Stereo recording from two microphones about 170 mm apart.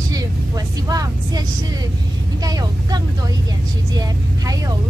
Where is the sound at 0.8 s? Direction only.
20° right (ahead or behind).